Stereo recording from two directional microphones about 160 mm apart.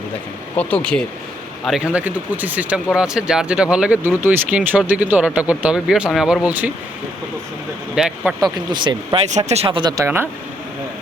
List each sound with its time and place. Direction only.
0.5 s speech: 10° left (ahead or behind)
1.6 s speech: 5° right (ahead or behind)
7.9 s speech: 5° right (ahead or behind)
8.5 s speech: 30° right (ahead or behind)
10.0 s speech: 15° right (ahead or behind)